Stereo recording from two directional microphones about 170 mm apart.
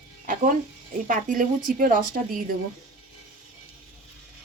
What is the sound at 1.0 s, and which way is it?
A woman's voice, 55° right (ahead or behind).